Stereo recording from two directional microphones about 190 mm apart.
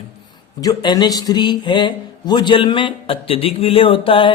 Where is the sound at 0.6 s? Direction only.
20° left (ahead or behind).